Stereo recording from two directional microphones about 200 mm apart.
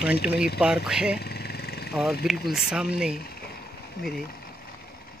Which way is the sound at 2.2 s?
Centre (ahead or behind).